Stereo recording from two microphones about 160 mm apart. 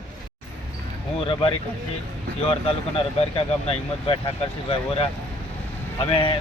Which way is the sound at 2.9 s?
35° left (ahead or behind).